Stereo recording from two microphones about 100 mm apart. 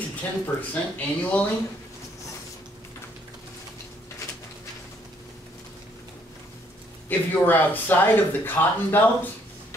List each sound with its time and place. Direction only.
0.1 s speech: 15° left (ahead or behind)
7.1 s speech: 20° left (ahead or behind)